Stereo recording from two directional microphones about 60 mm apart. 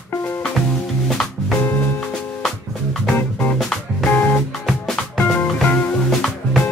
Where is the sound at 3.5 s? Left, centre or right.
Centre.